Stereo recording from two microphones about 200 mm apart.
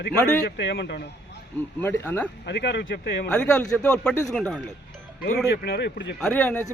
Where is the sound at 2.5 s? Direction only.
55° left (ahead or behind).